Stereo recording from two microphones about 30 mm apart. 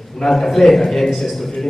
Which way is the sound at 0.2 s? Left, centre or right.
Centre.